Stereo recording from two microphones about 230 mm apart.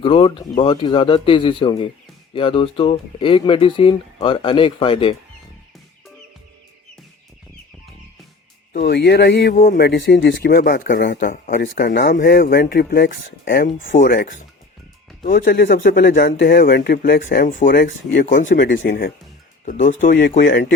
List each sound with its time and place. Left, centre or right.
0.0 s speech: left
8.7 s speech: left
11.3 s speech: left
13.7 s speech: left
14.0 s speech: left